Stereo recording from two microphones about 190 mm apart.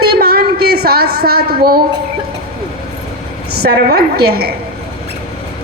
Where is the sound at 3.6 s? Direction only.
55° right (ahead or behind).